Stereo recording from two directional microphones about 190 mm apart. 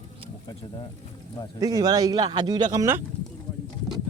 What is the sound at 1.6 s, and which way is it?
A man's voice, 20° right (ahead or behind).